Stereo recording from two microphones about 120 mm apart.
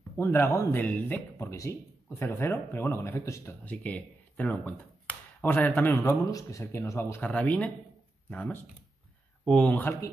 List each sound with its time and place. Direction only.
0.1 s speech: 20° left (ahead or behind)
3.6 s speech: 10° left (ahead or behind)